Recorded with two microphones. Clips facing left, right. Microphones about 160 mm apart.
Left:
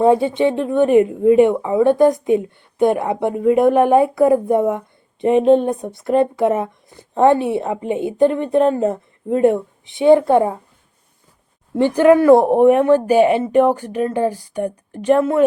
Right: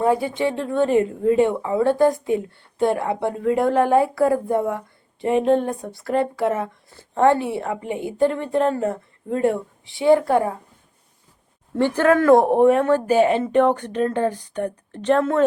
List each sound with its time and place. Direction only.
0.0 s speech: 25° left (ahead or behind)
11.7 s speech: 15° left (ahead or behind)